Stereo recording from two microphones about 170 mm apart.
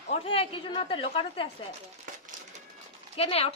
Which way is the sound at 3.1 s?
35° left (ahead or behind).